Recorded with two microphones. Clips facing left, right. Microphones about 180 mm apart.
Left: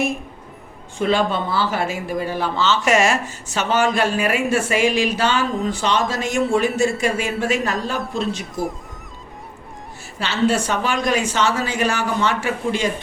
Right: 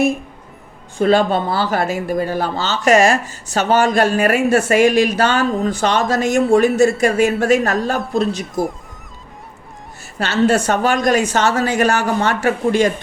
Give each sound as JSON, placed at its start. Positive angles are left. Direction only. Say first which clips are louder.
{"t": 0.9, "sound": "speech", "louder": "right 5 dB", "side_deg": -40}
{"t": 10.2, "sound": "speech", "louder": "right 4 dB", "side_deg": -45}